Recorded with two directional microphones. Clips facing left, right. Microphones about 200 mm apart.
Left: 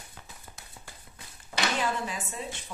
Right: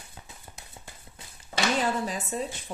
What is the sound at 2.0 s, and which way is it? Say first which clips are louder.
Speech: right 5 dB; 40° right (ahead or behind).